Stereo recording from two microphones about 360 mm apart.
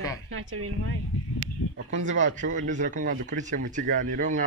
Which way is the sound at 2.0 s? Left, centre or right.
Right.